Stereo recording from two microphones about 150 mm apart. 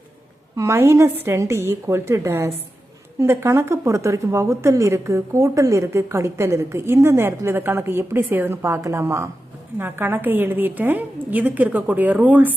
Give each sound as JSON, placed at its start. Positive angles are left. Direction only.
{"t": 0.5, "sound": "a woman's voice", "side_deg": -20}